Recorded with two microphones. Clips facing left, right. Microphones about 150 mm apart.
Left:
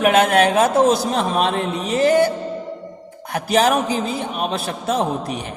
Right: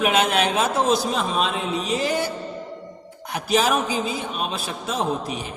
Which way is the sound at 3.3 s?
55° left (ahead or behind).